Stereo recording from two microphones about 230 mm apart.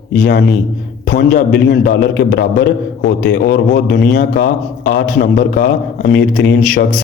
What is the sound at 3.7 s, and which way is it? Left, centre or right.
A man's voice, left.